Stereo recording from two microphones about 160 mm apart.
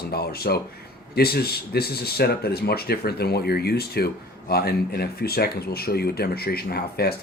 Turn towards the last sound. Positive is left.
turn(degrees=75)  # may be behind; listen again after turning